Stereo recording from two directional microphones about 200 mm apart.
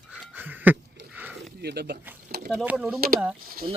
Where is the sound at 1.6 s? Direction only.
55° right (ahead or behind).